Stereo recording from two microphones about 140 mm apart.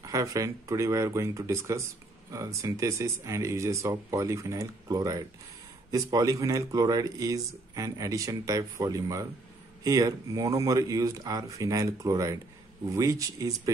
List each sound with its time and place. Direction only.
0.0 s speech: 25° right (ahead or behind)